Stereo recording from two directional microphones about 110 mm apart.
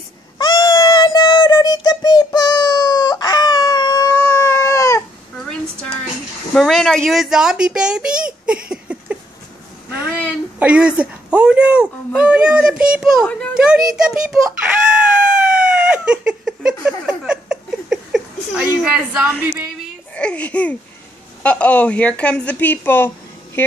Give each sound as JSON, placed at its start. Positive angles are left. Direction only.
{"t": 0.4, "sound": "child singing", "side_deg": 40}
{"t": 6.5, "sound": "a sound", "side_deg": 5}
{"t": 10.6, "sound": "a sound", "side_deg": -10}
{"t": 13.2, "sound": "a child's voice", "side_deg": 10}
{"t": 13.6, "sound": "a child's voice", "side_deg": -5}
{"t": 14.6, "sound": "chicken", "side_deg": -10}
{"t": 16.8, "sound": "a sound", "side_deg": -10}
{"t": 20.2, "sound": "babbling", "side_deg": 10}
{"t": 21.4, "sound": "a woman's voice", "side_deg": 10}